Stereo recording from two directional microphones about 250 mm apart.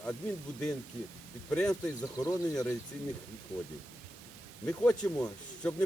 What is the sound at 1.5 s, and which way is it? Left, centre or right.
Speech, centre.